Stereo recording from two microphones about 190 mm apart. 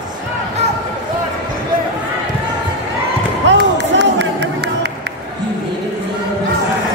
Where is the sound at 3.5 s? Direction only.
65° right (ahead or behind).